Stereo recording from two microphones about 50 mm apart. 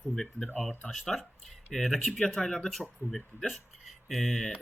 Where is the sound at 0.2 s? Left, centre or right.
Centre.